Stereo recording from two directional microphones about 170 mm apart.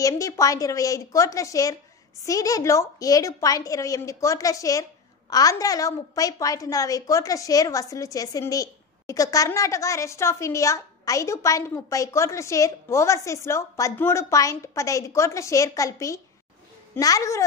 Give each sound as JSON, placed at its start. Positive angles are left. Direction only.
{"t": 0.0, "sound": "a woman's voice", "side_deg": 20}